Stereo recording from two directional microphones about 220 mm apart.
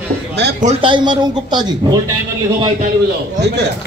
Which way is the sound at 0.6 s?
25° right (ahead or behind).